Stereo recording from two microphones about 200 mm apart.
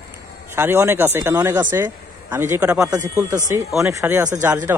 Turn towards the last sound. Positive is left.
turn(degrees=-10)  # may be behind; listen again after turning